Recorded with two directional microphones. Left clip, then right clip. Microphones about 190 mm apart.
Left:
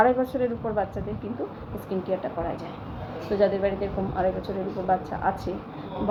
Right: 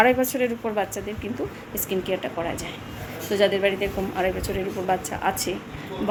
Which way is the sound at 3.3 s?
25° right (ahead or behind).